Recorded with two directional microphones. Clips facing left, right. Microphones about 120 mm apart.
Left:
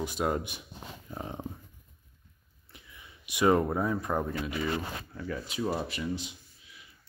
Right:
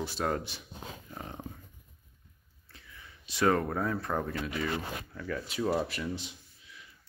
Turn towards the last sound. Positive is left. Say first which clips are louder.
# left 1 dB
turn(degrees=0)  # may be behind; listen again after turning